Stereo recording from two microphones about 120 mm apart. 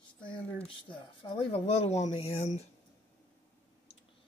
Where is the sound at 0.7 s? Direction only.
45° left (ahead or behind); by 2.6 s 65° left (ahead or behind).